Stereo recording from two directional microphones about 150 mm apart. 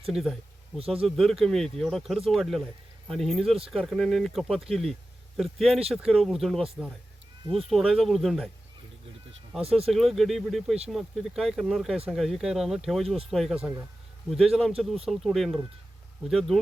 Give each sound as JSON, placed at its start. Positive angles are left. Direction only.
{"t": 0.1, "sound": "speech", "side_deg": 0}
{"t": 7.7, "sound": "speech", "side_deg": 0}
{"t": 9.6, "sound": "speech", "side_deg": -40}
{"t": 9.9, "sound": "speech", "side_deg": 0}